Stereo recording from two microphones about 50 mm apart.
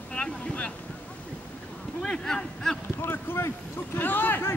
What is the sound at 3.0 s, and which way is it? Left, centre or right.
Speech, left.